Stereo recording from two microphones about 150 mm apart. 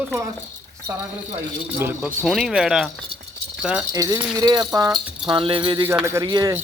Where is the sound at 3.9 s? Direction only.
25° right (ahead or behind).